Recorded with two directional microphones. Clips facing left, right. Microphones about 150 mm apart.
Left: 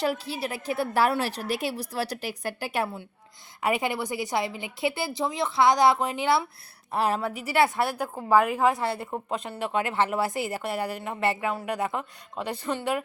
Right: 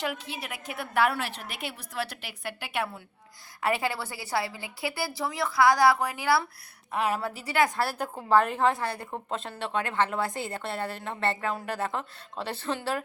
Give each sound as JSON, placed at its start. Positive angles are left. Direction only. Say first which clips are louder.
{"t": 0.0, "sound": "a woman's voice", "louder": "left 6 dB", "side_deg": 35}
{"t": 3.6, "sound": "a woman's voice", "louder": "left 2 dB", "side_deg": 15}
{"t": 6.9, "sound": "a woman's voice", "louder": "left 2 dB", "side_deg": 35}
{"t": 7.4, "sound": "a woman's voice", "louder": "left 2 dB", "side_deg": 25}
{"t": 8.7, "sound": "a woman's voice", "louder": "left 3 dB", "side_deg": 25}
{"t": 9.0, "sound": "speech", "louder": "left 3 dB", "side_deg": 10}
{"t": 9.7, "sound": "speech", "louder": "left 2 dB", "side_deg": 15}